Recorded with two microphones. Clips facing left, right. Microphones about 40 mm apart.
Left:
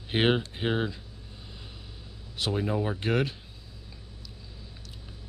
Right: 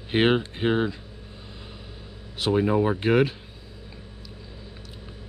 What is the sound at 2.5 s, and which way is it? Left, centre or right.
Speech, right.